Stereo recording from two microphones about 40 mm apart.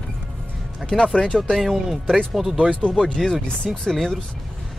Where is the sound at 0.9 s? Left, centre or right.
Left.